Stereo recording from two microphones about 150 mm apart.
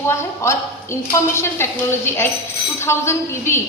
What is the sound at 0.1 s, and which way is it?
A woman's voice, 20° left (ahead or behind).